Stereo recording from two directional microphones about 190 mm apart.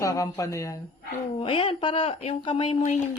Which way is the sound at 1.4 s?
30° left (ahead or behind).